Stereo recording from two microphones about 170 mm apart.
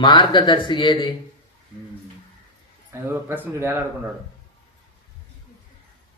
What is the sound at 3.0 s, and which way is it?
Speech, 10° right (ahead or behind).